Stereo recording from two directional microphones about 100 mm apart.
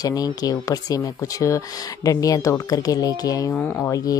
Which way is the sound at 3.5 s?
15° left (ahead or behind).